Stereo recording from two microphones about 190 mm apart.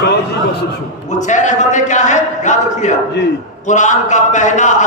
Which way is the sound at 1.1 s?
40° left (ahead or behind).